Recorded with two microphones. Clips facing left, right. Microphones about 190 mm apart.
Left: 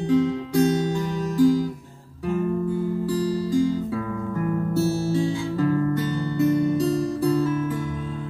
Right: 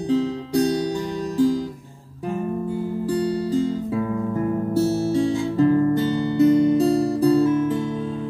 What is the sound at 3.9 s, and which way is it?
Guitar, 30° right (ahead or behind).